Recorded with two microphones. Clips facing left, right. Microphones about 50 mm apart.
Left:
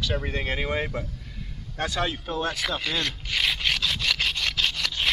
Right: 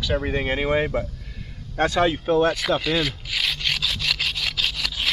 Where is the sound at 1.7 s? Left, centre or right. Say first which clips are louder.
Right 8 dB; right.